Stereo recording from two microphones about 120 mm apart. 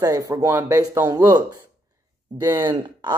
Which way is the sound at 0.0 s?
25° right (ahead or behind).